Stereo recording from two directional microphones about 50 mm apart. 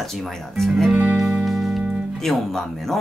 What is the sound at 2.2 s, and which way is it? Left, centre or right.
Speech, centre.